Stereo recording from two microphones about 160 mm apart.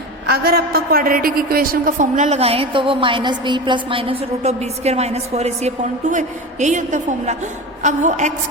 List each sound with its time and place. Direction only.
0.3 s a woman's voice: 70° right (ahead or behind); by 8.3 s 50° right (ahead or behind)